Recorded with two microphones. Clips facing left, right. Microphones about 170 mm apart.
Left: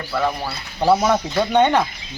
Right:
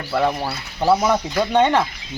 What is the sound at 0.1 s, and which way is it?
Speech, 25° right (ahead or behind).